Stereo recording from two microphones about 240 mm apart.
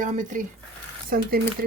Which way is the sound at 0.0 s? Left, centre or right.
Right.